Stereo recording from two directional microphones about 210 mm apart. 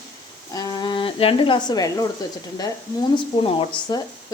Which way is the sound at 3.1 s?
25° left (ahead or behind).